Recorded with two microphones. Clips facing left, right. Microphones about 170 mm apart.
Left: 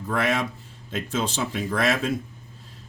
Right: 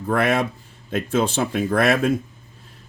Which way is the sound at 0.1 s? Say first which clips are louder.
Right 5 dB; 55° right (ahead or behind).